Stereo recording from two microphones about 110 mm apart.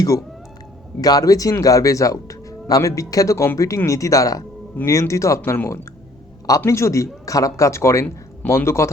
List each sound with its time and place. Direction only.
1.0 s speech: 35° left (ahead or behind)